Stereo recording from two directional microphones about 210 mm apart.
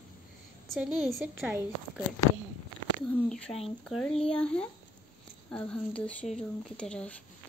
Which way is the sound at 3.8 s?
5° left (ahead or behind).